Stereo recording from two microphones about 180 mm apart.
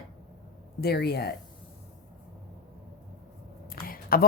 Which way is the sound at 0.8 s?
60° left (ahead or behind).